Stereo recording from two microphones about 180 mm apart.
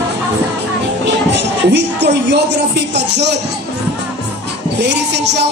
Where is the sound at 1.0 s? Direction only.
75° right (ahead or behind).